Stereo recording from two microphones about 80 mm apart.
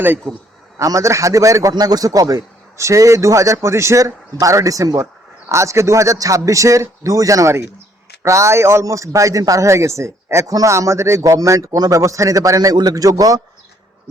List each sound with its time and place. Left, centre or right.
0.3 s a man's voice: right
0.8 s a man's voice: right
1.7 s a man's voice: right